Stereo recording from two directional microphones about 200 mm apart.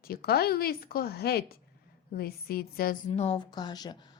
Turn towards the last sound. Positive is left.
turn(degrees=20)  # may be behind; listen again after turning